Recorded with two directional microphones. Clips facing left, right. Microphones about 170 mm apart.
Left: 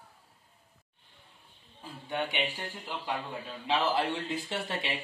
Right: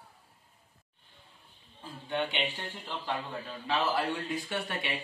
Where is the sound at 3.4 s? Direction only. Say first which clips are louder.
Left 2 dB; 20° left (ahead or behind).